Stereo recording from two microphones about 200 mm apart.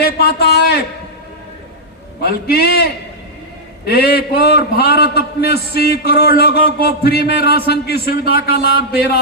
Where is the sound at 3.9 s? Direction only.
50° left (ahead or behind).